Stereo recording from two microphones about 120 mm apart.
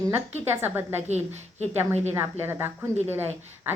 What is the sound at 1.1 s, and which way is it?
A woman's voice, 65° right (ahead or behind).